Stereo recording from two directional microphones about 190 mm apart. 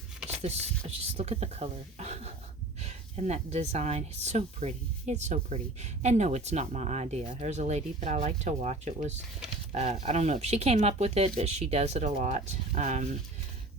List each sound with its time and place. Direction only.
0.4 s speech: 35° right (ahead or behind)